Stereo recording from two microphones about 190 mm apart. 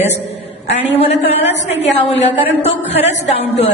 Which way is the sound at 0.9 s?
30° left (ahead or behind).